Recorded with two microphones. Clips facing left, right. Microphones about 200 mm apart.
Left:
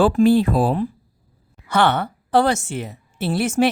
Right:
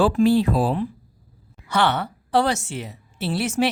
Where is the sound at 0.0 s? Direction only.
50° left (ahead or behind).